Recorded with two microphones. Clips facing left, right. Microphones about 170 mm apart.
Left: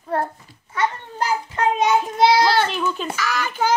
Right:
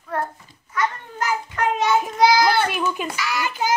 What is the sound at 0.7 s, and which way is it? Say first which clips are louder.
Children playing: left 1 dB; 30° left (ahead or behind).